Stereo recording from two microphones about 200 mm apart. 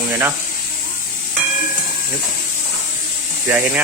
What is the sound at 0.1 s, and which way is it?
Speech, 10° right (ahead or behind).